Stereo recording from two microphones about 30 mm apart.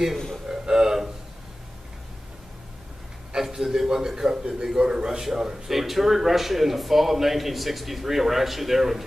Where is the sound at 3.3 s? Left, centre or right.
Centre.